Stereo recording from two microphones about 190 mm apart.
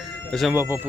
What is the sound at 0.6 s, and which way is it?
Speech, 10° right (ahead or behind).